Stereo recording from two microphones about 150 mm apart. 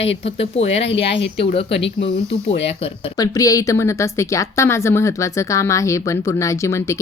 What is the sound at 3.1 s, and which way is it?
Speech, 25° left (ahead or behind).